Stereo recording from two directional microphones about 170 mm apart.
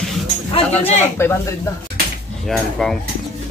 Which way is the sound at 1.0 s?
15° left (ahead or behind).